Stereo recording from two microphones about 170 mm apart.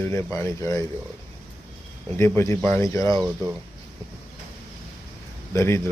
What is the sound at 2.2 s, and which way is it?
Speech, 15° left (ahead or behind).